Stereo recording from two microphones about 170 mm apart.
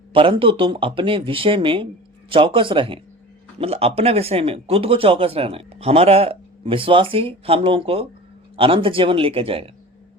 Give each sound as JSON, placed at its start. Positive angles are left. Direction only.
{"t": 0.1, "sound": "speech", "side_deg": -30}